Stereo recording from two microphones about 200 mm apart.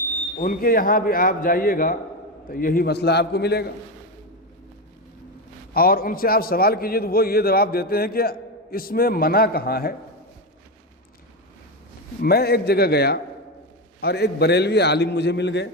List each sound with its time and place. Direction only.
0.3 s a man's voice: 45° left (ahead or behind)
5.7 s a man's voice: 45° left (ahead or behind)
12.2 s a man's voice: 50° left (ahead or behind)